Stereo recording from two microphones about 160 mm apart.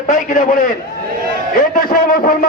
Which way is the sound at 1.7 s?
60° left (ahead or behind).